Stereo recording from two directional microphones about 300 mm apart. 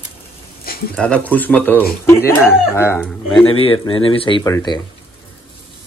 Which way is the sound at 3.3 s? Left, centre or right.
Centre.